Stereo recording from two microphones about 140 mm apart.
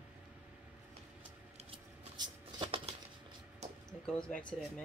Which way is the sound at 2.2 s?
35° right (ahead or behind).